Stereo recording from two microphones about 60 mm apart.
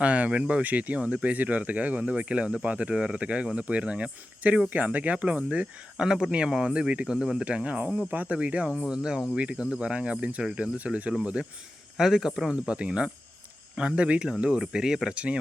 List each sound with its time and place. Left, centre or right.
0.0 s speech: right
7.4 s speech: right